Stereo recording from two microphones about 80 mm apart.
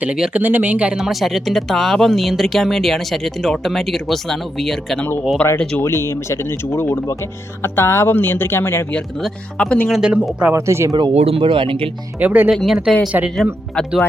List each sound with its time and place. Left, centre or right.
0.0 s speech: centre
5.4 s speech: centre
5.8 s speech: left
9.6 s speech: centre
10.5 s speech: right
10.9 s speech: right
12.2 s speech: right
12.6 s speech: centre
13.3 s speech: centre